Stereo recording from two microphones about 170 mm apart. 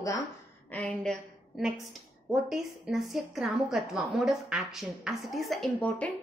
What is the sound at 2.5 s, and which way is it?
A woman's voice, centre (ahead or behind).